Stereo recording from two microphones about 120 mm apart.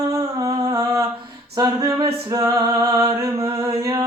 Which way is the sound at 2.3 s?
30° right (ahead or behind).